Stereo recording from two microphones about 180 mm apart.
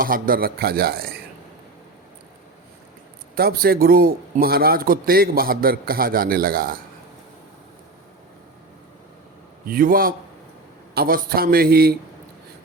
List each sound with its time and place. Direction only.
0.0 s a man's voice: 50° right (ahead or behind)
3.3 s a man's voice: 55° right (ahead or behind)
9.6 s a man's voice: 55° right (ahead or behind)